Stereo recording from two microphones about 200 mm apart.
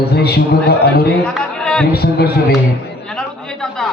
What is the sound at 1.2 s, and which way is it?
Speech, 5° left (ahead or behind).